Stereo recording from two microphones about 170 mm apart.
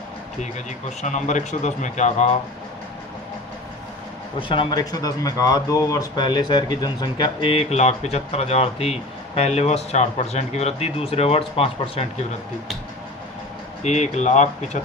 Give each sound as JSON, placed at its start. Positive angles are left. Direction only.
{"t": 0.9, "sound": "speech", "side_deg": 45}
{"t": 4.4, "sound": "speech", "side_deg": 30}
{"t": 13.8, "sound": "speech", "side_deg": 45}